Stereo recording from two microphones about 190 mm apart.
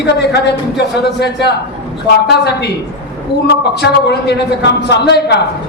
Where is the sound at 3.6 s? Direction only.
60° left (ahead or behind).